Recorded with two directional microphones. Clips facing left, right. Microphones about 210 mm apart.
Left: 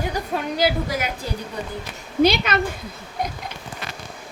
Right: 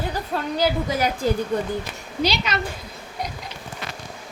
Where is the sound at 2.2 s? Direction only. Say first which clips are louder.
Left 5 dB; 55° left (ahead or behind).